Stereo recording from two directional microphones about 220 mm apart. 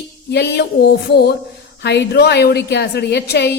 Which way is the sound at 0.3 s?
50° left (ahead or behind).